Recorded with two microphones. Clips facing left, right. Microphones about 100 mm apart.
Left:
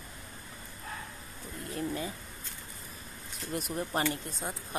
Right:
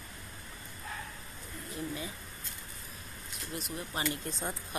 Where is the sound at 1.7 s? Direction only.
45° left (ahead or behind).